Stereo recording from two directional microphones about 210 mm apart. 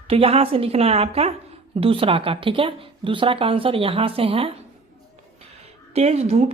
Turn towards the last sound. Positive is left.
turn(degrees=-30)  # may be behind; listen again after turning